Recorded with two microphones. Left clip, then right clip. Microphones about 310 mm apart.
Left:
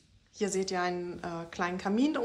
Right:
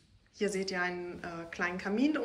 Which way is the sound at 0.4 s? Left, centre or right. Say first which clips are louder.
Left 2 dB; centre.